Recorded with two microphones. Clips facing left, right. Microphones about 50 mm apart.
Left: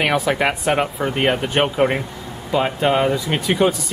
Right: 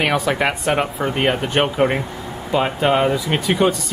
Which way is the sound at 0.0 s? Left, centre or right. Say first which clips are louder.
Even; centre.